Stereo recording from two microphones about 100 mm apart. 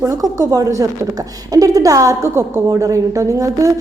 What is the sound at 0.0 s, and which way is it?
Speech, 35° right (ahead or behind).